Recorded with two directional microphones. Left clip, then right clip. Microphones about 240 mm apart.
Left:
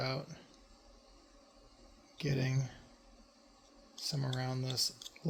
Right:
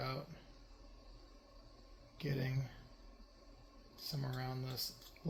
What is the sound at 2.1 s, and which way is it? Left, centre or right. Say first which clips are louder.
Speech: left 5 dB; left.